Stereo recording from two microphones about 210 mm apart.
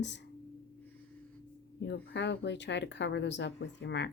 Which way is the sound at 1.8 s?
55° left (ahead or behind).